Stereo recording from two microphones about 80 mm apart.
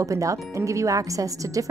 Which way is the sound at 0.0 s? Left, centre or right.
Right.